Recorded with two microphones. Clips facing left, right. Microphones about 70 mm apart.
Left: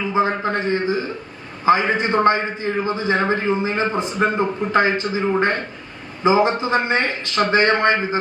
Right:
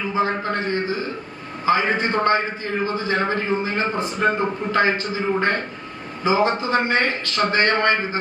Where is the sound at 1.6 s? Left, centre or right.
Left.